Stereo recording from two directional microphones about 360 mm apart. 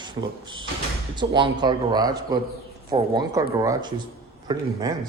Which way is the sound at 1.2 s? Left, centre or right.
Centre.